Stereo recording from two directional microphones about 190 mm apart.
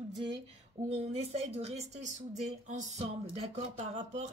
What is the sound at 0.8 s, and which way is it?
Speech, 35° right (ahead or behind).